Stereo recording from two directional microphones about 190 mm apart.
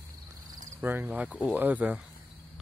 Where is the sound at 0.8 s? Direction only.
10° right (ahead or behind).